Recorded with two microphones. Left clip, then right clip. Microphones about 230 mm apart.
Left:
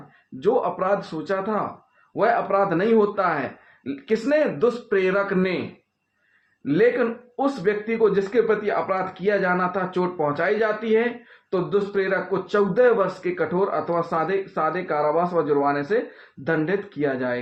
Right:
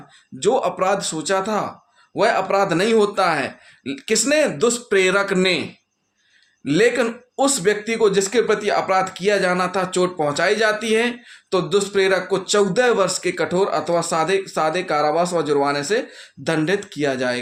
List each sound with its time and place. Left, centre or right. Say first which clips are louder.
0.3 s speech: right 3 dB; right
6.7 s speech: right 2 dB; right